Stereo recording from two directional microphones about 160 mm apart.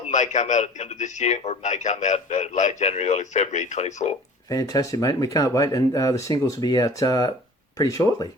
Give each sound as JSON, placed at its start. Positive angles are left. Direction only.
{"t": 0.1, "sound": "a man's voice", "side_deg": 50}
{"t": 4.4, "sound": "speech", "side_deg": 20}